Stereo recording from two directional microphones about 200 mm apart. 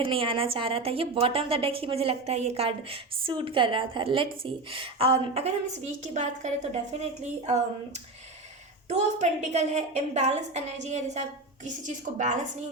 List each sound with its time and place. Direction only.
0.0 s a woman's voice: 25° right (ahead or behind)
8.9 s a woman's voice: 35° right (ahead or behind)